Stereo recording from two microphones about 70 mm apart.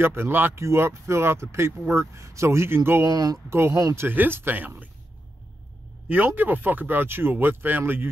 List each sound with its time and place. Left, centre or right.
0.0 s speech: right
3.1 s speech: right
3.4 s speech: right
6.0 s speech: right